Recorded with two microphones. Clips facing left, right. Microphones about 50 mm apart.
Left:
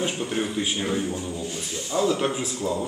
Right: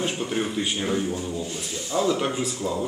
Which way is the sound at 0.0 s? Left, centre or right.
Centre.